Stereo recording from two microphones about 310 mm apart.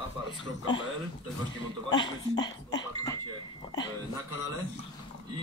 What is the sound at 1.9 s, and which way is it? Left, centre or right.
Speech, centre.